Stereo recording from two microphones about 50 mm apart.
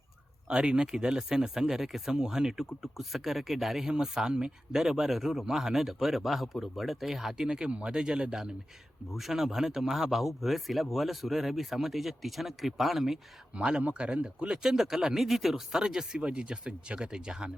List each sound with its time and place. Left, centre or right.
0.4 s speech: centre
7.9 s speech: centre
13.6 s speech: right